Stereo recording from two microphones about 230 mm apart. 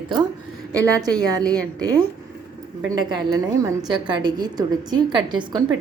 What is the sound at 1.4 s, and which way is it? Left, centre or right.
Speech, centre.